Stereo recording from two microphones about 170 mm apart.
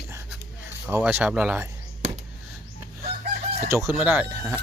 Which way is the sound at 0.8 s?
10° right (ahead or behind).